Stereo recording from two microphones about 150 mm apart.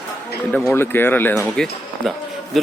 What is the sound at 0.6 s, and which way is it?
A man's voice, 15° left (ahead or behind).